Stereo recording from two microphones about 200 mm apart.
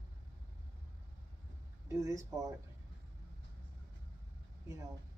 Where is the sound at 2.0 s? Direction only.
15° right (ahead or behind).